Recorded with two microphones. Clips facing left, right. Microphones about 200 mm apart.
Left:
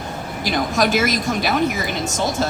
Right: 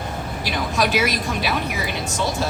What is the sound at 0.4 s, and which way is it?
A woman's voice, 45° left (ahead or behind).